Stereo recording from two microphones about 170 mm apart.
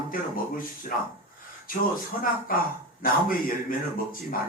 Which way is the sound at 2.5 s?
55° left (ahead or behind).